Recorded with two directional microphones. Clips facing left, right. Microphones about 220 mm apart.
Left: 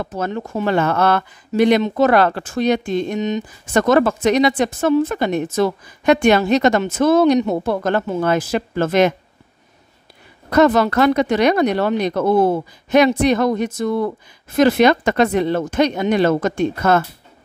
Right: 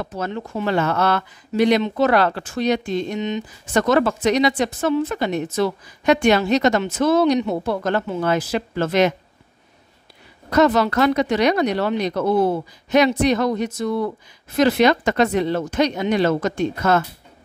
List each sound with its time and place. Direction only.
0.0 s speech: 50° left (ahead or behind)
10.5 s speech: 50° left (ahead or behind)